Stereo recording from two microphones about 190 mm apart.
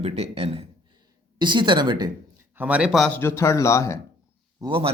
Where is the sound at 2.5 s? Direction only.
5° right (ahead or behind).